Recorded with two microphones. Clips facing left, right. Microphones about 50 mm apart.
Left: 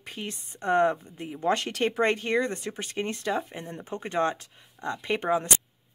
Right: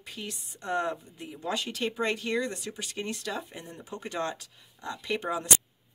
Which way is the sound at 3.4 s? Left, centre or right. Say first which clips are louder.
Left 5 dB; left.